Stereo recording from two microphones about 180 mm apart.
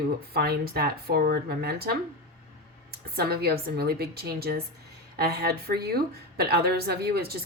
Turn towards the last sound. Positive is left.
turn(degrees=-60)  # may be behind; listen again after turning